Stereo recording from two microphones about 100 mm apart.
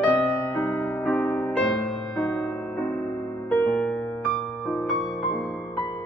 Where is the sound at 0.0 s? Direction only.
15° left (ahead or behind).